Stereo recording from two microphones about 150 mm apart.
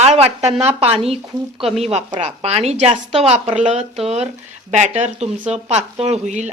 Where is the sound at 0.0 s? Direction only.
45° right (ahead or behind).